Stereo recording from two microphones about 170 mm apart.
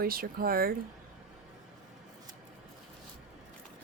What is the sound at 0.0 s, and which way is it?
Speech, 60° right (ahead or behind).